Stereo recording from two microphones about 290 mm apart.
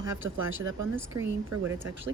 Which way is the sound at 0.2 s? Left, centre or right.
Right.